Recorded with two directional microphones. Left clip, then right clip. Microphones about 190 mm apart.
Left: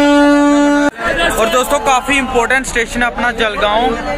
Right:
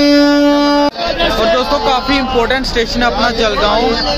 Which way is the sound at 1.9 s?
Centre (ahead or behind).